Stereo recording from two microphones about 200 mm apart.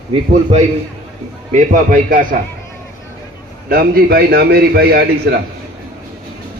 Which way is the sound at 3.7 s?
50° right (ahead or behind).